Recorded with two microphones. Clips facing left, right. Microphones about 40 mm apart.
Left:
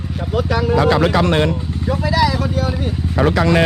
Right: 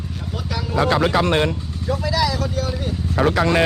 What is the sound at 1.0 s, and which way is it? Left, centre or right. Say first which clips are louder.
Speech: left 3 dB; left.